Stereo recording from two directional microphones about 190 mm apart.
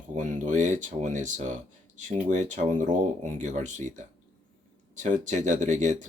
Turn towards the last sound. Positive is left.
turn(degrees=-40)  # may be behind; listen again after turning